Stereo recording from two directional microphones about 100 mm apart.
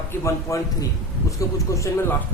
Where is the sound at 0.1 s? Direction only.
30° left (ahead or behind).